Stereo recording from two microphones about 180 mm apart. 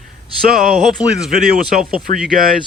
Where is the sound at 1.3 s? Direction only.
55° right (ahead or behind).